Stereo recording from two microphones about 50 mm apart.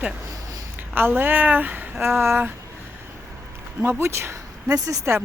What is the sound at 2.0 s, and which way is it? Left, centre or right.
Speech, right.